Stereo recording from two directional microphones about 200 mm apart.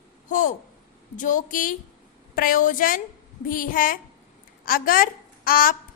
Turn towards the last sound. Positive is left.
turn(degrees=45)  # may be behind; listen again after turning